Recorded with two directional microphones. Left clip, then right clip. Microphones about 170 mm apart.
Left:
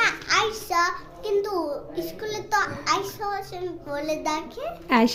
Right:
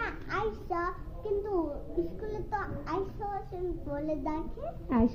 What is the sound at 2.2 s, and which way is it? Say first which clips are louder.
A child's voice: left 11 dB; 20° left (ahead or behind).